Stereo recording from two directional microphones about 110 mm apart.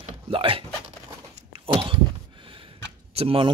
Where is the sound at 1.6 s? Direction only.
55° right (ahead or behind).